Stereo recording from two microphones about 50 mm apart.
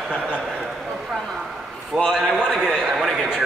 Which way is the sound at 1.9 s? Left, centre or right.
Centre.